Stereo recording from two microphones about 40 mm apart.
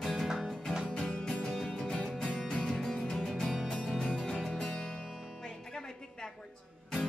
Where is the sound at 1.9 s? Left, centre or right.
Left; by 3.5 s centre.